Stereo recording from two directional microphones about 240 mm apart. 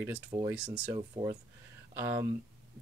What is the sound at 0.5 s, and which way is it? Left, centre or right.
Speech, centre.